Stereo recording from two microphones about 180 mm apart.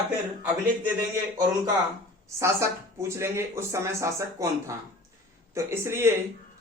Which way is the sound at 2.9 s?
15° right (ahead or behind).